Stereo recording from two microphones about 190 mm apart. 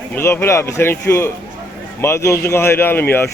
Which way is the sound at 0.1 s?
15° left (ahead or behind).